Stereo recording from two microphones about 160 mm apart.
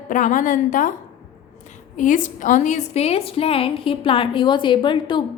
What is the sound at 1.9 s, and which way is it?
A woman's voice, 55° left (ahead or behind).